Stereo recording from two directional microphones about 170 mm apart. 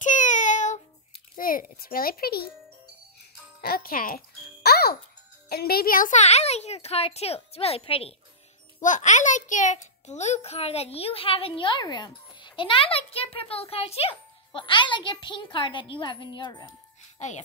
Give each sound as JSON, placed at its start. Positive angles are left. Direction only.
{"t": 0.0, "sound": "child singing", "side_deg": 45}
{"t": 1.3, "sound": "a child's voice", "side_deg": 55}
{"t": 3.2, "sound": "music", "side_deg": 60}
{"t": 5.5, "sound": "a child's voice", "side_deg": 65}
{"t": 8.8, "sound": "a child's voice", "side_deg": 45}